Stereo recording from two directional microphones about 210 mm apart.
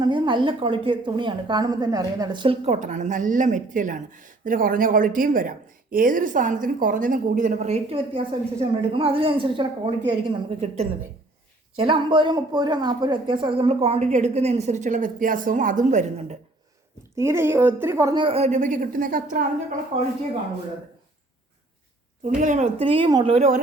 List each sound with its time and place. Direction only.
0.0 s a woman's voice: 20° right (ahead or behind)
17.2 s a woman's voice: 10° right (ahead or behind); by 19.5 s 40° right (ahead or behind)
22.4 s a woman's voice: 35° right (ahead or behind)